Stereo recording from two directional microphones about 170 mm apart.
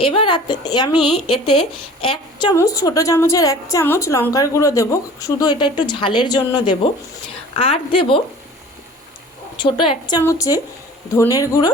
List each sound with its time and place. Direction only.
0.0 s a woman's voice: 30° left (ahead or behind)
2.0 s speech: 30° left (ahead or behind)
2.5 s a woman's voice: 20° left (ahead or behind)
7.5 s a woman's voice: 35° left (ahead or behind)
9.6 s a woman's voice: 30° left (ahead or behind)